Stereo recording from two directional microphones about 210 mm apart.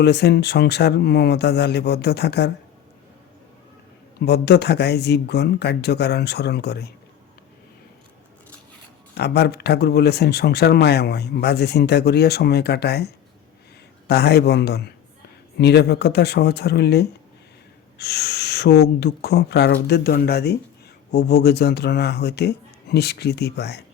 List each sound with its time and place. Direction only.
0.0 s speech: 50° left (ahead or behind)
4.2 s speech: 50° left (ahead or behind)
9.1 s speech: 50° left (ahead or behind)
14.1 s speech: 50° left (ahead or behind)